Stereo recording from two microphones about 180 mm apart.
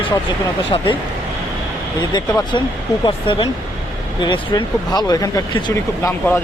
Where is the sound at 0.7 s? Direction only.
25° left (ahead or behind).